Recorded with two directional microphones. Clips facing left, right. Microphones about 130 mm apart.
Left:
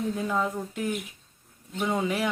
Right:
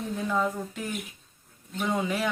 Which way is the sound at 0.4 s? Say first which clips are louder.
Left 1 dB; 15° left (ahead or behind).